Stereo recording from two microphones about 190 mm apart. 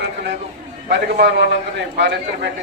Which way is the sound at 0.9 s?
65° right (ahead or behind).